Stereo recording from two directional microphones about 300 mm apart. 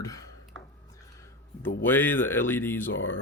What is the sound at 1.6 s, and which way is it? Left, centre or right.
Speech, centre.